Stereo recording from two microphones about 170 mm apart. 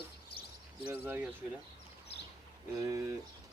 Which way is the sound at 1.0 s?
10° right (ahead or behind).